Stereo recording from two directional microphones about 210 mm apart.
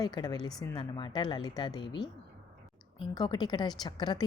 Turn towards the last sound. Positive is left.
turn(degrees=20)  # may be behind; listen again after turning